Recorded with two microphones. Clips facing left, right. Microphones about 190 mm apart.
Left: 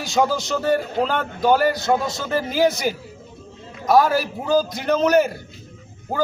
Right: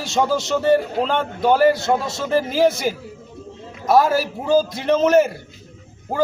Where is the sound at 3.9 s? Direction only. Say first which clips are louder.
Right 1 dB; centre (ahead or behind).